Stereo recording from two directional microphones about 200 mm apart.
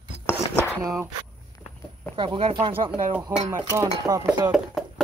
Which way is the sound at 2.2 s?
25° right (ahead or behind).